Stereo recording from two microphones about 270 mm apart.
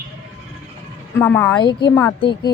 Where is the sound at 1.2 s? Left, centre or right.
Centre.